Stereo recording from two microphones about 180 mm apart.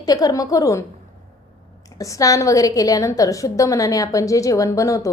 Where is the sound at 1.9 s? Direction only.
20° left (ahead or behind).